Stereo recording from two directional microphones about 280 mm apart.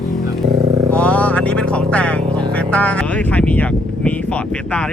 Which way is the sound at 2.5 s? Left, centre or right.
Centre.